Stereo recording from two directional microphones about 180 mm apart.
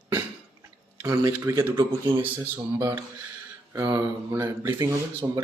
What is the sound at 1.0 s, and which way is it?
Speech, 15° right (ahead or behind).